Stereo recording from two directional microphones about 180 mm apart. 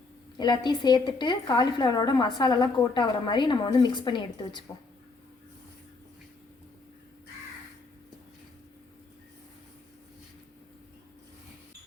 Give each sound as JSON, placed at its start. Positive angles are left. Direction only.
{"t": 0.3, "sound": "a woman's voice", "side_deg": 25}